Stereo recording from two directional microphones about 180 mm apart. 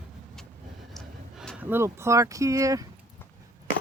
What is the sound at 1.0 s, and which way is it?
Speech, centre (ahead or behind).